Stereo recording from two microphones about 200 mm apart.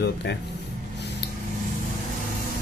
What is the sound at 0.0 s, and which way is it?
Speech, 60° left (ahead or behind).